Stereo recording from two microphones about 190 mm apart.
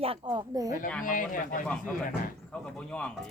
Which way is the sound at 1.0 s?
45° left (ahead or behind).